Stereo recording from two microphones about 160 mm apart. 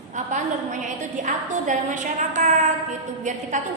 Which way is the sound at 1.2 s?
50° right (ahead or behind).